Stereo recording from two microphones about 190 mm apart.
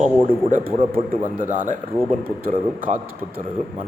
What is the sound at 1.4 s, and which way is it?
A man's voice, 45° right (ahead or behind).